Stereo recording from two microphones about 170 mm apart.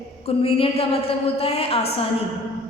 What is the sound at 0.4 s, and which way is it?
A woman's voice, 35° left (ahead or behind).